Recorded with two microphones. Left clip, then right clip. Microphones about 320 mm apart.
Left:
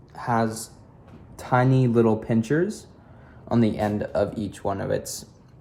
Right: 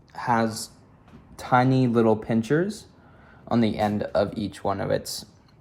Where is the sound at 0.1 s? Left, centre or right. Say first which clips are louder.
Right 1 dB; centre.